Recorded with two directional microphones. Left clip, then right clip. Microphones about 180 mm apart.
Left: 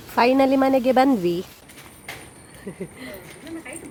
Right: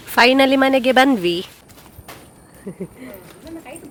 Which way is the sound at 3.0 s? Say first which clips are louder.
Even; 30° right (ahead or behind).